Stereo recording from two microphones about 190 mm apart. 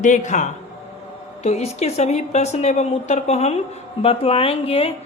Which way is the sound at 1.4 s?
35° left (ahead or behind).